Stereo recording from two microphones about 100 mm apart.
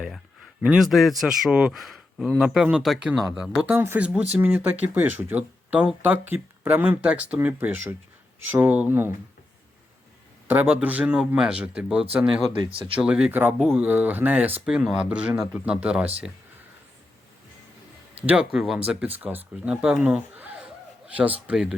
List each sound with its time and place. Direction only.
0.6 s a man's voice: 10° right (ahead or behind)
3.7 s speech: 20° right (ahead or behind)
10.5 s speech: 15° right (ahead or behind)
14.6 s speech: 5° right (ahead or behind)
18.9 s speech: 15° right (ahead or behind)